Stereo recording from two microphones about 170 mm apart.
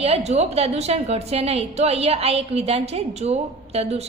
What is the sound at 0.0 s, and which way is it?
A woman's voice, 40° right (ahead or behind).